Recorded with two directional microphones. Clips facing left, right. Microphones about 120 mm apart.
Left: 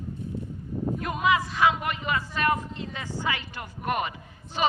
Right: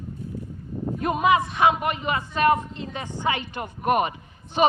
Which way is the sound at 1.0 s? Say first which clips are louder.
Right 5 dB; 25° right (ahead or behind).